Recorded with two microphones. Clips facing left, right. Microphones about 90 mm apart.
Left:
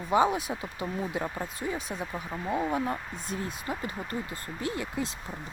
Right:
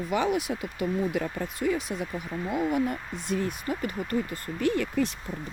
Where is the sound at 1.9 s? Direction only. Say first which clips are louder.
Right 2 dB; 35° left (ahead or behind).